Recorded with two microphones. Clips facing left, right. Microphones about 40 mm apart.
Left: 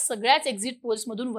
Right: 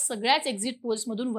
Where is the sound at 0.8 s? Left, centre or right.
Left.